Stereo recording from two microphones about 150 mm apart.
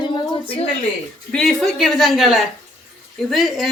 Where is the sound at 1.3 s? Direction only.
5° left (ahead or behind).